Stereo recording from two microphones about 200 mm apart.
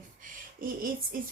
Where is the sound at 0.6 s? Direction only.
45° right (ahead or behind).